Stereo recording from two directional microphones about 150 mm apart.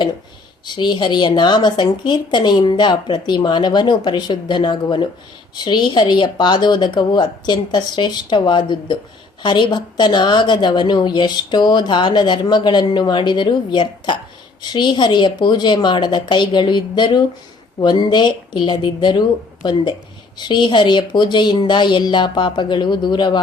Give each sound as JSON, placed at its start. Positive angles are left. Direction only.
{"t": 0.6, "sound": "a woman's voice", "side_deg": 30}